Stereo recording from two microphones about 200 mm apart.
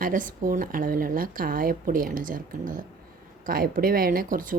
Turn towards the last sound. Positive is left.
turn(degrees=-40)  # may be behind; listen again after turning